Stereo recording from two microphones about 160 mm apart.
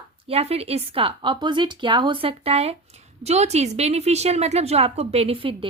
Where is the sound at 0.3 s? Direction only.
40° right (ahead or behind).